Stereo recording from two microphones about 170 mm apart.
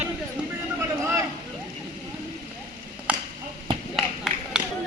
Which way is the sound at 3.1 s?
5° right (ahead or behind).